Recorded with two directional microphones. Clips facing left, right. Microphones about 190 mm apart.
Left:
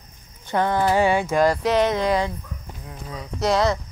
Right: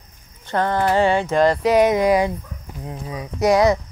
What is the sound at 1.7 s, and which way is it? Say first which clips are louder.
Speech: right 4 dB; 15° right (ahead or behind).